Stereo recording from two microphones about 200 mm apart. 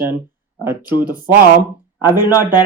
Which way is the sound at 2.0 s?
10° right (ahead or behind).